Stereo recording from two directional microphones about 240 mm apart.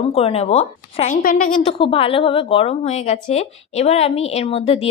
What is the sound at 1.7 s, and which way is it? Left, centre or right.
A woman's voice, left.